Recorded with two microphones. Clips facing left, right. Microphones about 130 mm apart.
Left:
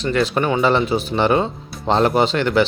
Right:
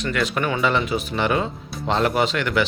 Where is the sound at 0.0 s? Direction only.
30° left (ahead or behind).